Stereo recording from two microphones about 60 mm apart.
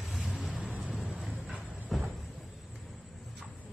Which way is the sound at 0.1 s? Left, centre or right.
Centre.